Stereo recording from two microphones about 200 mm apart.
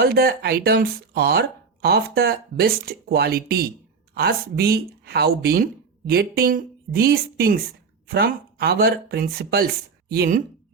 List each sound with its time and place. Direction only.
0.0 s speech: 50° right (ahead or behind)